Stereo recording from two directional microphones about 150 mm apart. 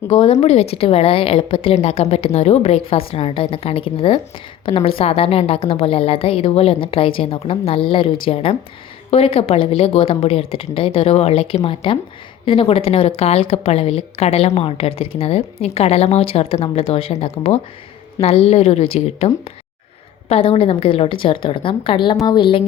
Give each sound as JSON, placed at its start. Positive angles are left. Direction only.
{"t": 0.1, "sound": "a woman's voice", "side_deg": 40}